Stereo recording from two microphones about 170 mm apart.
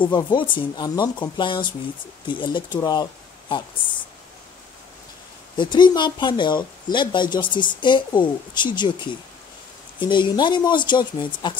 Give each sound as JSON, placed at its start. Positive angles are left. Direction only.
{"t": 0.0, "sound": "speech", "side_deg": 30}
{"t": 5.6, "sound": "speech", "side_deg": 25}